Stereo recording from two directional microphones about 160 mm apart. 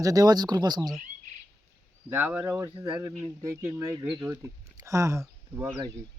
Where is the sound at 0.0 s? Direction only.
20° right (ahead or behind).